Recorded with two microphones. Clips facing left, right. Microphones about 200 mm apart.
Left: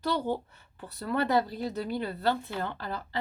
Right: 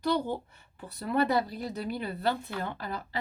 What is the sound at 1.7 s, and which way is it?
Speech, 15° right (ahead or behind).